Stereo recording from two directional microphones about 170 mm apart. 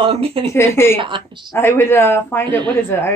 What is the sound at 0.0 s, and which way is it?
Speech, 35° right (ahead or behind).